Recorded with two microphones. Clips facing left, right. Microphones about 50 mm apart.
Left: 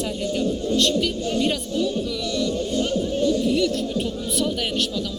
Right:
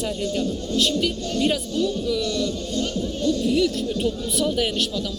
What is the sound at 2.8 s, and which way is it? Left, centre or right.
Music, centre.